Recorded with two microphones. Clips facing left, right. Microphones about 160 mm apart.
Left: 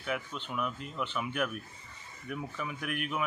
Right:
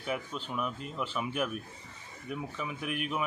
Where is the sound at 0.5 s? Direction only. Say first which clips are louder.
Even; centre (ahead or behind).